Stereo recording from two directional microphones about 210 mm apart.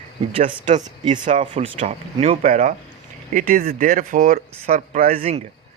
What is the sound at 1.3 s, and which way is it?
Speech, 30° right (ahead or behind).